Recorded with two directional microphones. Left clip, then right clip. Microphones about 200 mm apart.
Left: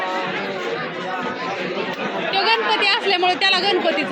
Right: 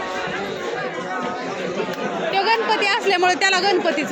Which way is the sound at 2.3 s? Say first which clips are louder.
Left 1 dB; 10° right (ahead or behind).